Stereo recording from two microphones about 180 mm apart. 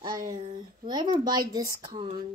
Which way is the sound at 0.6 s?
25° right (ahead or behind).